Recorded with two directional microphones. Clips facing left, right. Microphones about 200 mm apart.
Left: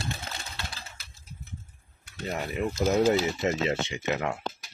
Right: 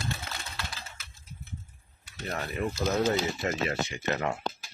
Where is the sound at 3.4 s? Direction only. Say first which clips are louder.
Left 3 dB; 20° left (ahead or behind).